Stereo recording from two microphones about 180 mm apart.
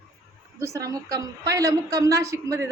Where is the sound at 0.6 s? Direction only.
15° right (ahead or behind).